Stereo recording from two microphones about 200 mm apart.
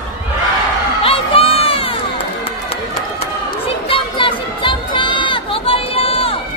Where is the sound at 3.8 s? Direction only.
25° left (ahead or behind).